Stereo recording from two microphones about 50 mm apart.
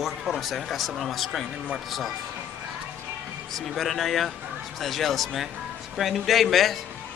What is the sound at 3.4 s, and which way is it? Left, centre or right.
Speech, centre.